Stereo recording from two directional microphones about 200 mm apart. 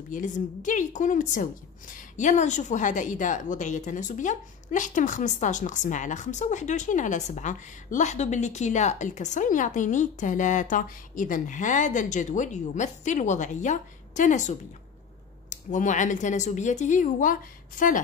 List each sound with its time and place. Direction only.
0.1 s a woman's voice: 40° left (ahead or behind)